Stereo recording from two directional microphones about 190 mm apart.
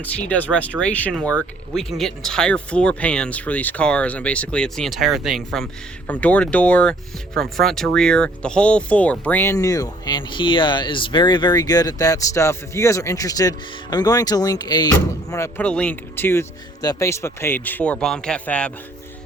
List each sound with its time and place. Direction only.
0.3 s speech: 10° left (ahead or behind)